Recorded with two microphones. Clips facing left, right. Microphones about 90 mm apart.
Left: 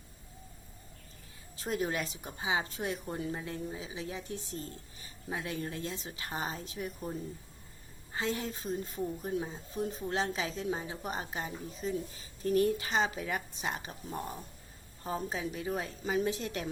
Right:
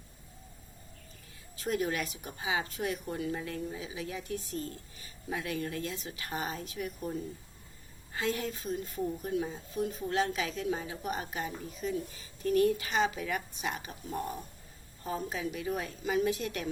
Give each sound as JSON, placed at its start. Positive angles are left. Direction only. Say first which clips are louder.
{"t": 1.5, "sound": "a woman's voice", "louder": "right 1 dB", "side_deg": 30}
{"t": 8.1, "sound": "a woman's voice", "louder": "right 1 dB", "side_deg": 25}
{"t": 15.0, "sound": "a woman's voice", "louder": "even", "side_deg": 30}